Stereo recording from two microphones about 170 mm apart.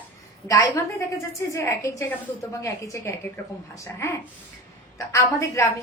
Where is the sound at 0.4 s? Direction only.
20° left (ahead or behind).